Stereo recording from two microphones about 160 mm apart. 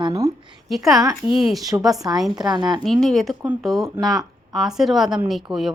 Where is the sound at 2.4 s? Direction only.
25° right (ahead or behind).